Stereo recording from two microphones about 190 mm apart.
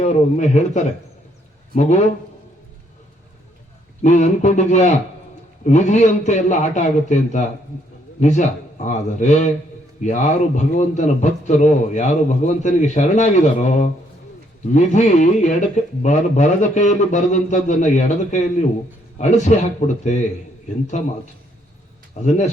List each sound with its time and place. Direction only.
0.0 s a man's voice: 40° left (ahead or behind)
4.0 s a man's voice: 40° left (ahead or behind)
22.2 s a man's voice: 40° left (ahead or behind)